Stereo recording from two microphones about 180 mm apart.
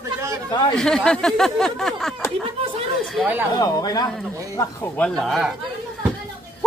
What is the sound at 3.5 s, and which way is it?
Speech, 20° left (ahead or behind).